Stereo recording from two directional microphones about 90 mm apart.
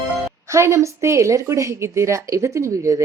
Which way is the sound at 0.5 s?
35° right (ahead or behind).